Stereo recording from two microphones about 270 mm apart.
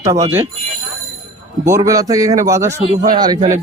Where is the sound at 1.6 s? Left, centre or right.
Centre.